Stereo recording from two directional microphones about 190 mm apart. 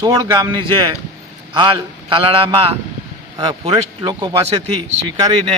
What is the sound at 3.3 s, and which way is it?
A man's voice, 20° right (ahead or behind).